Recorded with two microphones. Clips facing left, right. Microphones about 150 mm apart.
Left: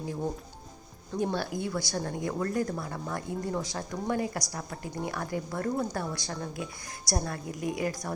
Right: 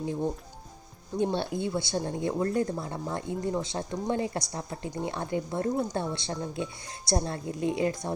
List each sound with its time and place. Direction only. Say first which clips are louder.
1.2 s a woman's voice: right 2 dB; 25° right (ahead or behind)